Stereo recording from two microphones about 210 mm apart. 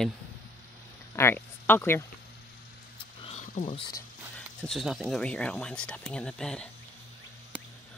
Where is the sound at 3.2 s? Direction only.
30° left (ahead or behind).